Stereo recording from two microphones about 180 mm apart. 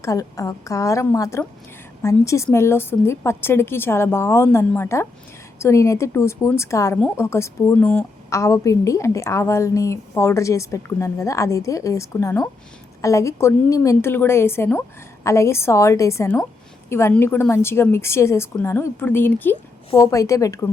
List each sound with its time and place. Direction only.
0.0 s a woman's voice: 20° left (ahead or behind)